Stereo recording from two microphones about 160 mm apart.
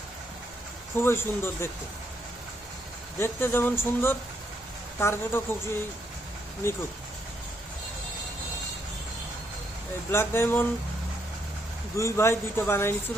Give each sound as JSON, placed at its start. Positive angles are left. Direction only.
{"t": 1.0, "sound": "speech", "side_deg": 15}
{"t": 3.2, "sound": "speech", "side_deg": 15}
{"t": 10.1, "sound": "speech", "side_deg": 15}
{"t": 11.9, "sound": "speech", "side_deg": 15}